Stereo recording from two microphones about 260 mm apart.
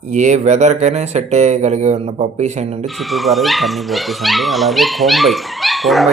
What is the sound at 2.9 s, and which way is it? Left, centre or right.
Speech, centre.